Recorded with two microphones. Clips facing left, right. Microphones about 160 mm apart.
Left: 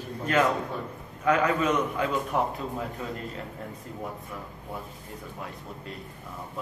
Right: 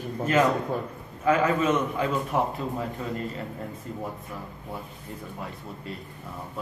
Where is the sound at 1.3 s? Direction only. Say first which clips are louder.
Right 1 dB; centre (ahead or behind).